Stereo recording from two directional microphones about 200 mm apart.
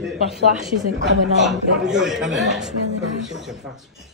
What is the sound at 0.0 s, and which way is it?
Speech, centre (ahead or behind).